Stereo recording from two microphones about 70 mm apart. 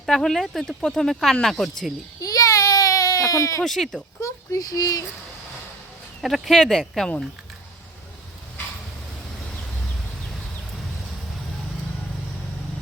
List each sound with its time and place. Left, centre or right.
0.0 s speech: centre
2.2 s baby cry: left
3.6 s speech: centre
4.2 s speech: left
6.2 s speech: centre